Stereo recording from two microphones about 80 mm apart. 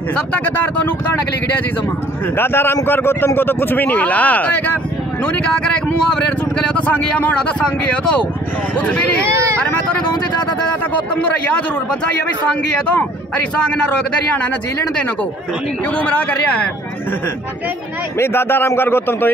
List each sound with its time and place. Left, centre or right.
2.3 s a man's voice: left
9.2 s speech: right
13.6 s a man's voice: centre
16.0 s speech: left
18.2 s speech: left